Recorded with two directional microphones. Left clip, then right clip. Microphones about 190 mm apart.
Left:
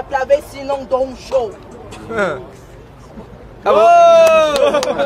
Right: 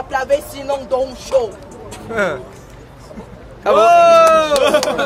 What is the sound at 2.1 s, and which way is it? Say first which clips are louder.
Speech: even; 5° left (ahead or behind).